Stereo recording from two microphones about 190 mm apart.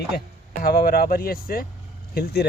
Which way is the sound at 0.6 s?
50° left (ahead or behind).